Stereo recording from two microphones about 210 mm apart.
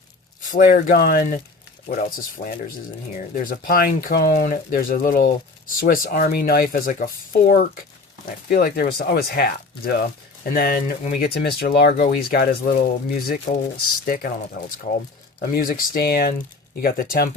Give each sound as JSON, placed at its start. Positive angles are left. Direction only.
{"t": 0.5, "sound": "speech", "side_deg": 40}
{"t": 15.7, "sound": "speech", "side_deg": 45}